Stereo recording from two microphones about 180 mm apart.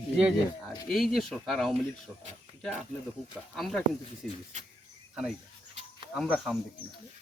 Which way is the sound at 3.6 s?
Centre (ahead or behind).